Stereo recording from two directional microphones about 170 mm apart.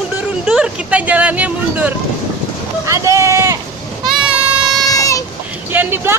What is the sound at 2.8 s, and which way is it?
Vehicle, 20° right (ahead or behind).